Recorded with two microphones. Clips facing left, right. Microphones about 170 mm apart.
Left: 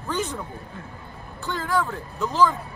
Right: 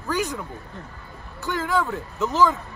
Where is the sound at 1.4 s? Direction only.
15° right (ahead or behind).